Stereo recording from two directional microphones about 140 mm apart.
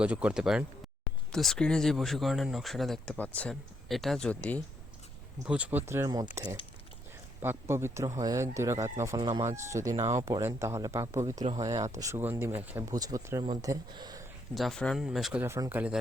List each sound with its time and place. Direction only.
0.0 s speech: 10° right (ahead or behind); by 4.6 s 10° left (ahead or behind)
5.5 s speech: 10° right (ahead or behind)
12.9 s speech: 25° right (ahead or behind)
14.5 s speech: centre (ahead or behind)
15.4 s speech: 20° right (ahead or behind)